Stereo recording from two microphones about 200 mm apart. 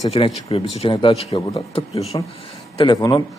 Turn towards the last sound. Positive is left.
turn(degrees=15)  # may be behind; listen again after turning